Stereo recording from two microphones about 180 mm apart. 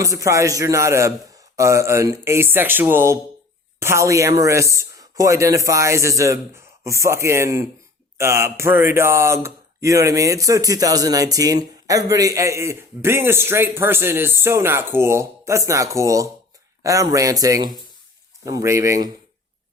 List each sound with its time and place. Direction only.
0.0 s speech: 15° right (ahead or behind)